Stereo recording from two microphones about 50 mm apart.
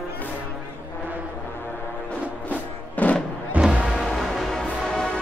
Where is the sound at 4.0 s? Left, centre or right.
Centre.